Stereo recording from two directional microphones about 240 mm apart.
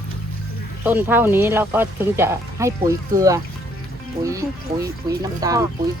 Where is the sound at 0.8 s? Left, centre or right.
Centre.